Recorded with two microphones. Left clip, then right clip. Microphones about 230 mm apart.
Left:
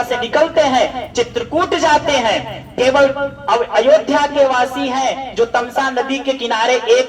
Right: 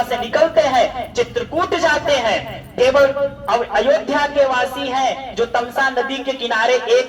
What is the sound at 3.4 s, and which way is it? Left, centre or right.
A woman's voice, left.